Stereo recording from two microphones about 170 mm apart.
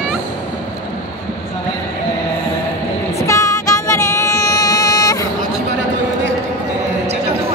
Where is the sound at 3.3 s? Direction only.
20° left (ahead or behind).